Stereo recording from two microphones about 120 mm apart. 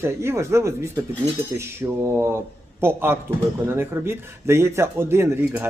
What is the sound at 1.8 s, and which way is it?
Speech, 20° right (ahead or behind).